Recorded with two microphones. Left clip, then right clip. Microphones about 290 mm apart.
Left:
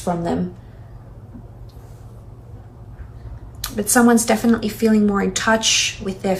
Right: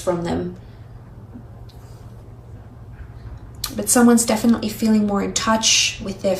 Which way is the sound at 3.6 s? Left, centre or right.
Centre.